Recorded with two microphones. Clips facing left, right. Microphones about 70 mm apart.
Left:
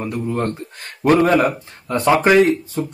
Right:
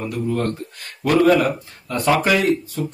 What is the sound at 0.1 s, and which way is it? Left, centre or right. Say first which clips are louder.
A man's voice: right 1 dB; left.